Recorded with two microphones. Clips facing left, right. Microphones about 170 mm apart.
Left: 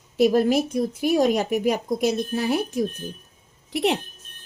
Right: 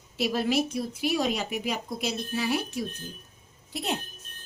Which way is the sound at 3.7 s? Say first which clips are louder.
Left 9 dB; 75° left (ahead or behind).